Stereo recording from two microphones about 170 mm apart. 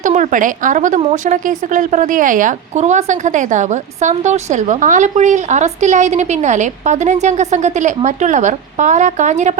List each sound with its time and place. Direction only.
0.0 s a woman's voice: 45° right (ahead or behind)